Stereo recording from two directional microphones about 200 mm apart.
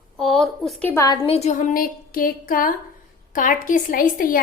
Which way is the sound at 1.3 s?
35° left (ahead or behind).